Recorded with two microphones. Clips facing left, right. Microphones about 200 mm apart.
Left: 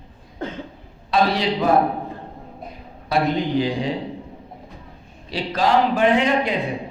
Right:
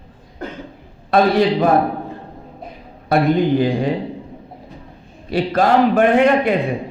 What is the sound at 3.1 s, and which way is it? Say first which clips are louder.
Speech: right 5 dB; 55° right (ahead or behind).